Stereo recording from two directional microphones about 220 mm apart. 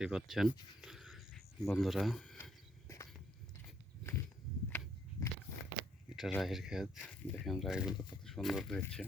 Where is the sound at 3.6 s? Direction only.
10° left (ahead or behind).